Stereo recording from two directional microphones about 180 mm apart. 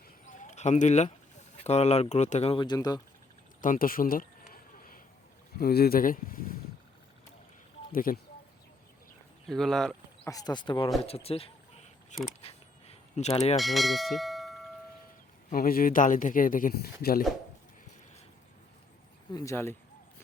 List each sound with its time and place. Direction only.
0.3 s a sound: 40° left (ahead or behind)
1.5 s speech: 35° left (ahead or behind); by 3.0 s 20° left (ahead or behind)
3.6 s a sound: 50° left (ahead or behind)
5.5 s speech: 55° left (ahead or behind)
7.9 s speech: 50° left (ahead or behind)
9.5 s speech: centre (ahead or behind)
10.2 s speech: 20° left (ahead or behind)
12.4 s a sound: 35° left (ahead or behind)
13.6 s church bell: centre (ahead or behind)
15.4 s speech: 55° left (ahead or behind)
19.3 s speech: 15° left (ahead or behind)